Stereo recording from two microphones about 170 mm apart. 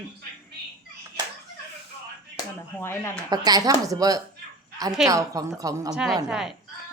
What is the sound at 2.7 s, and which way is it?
Speech, 15° left (ahead or behind).